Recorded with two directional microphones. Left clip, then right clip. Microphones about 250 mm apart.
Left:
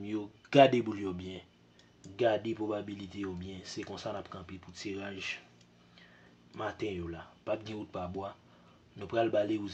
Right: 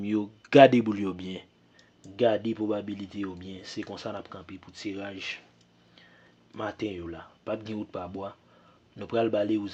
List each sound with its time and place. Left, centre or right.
0.0 s speech: right
6.6 s speech: right